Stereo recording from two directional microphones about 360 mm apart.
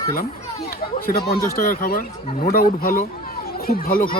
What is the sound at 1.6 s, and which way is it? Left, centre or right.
Speech, left.